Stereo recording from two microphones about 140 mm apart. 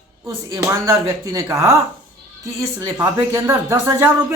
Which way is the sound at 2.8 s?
20° right (ahead or behind).